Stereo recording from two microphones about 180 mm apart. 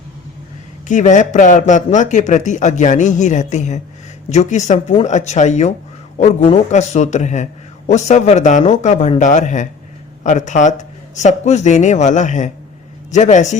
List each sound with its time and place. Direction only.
0.9 s a man's voice: 45° left (ahead or behind)